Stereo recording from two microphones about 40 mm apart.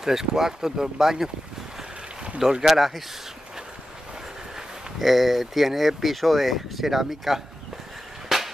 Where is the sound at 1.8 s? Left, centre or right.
Right.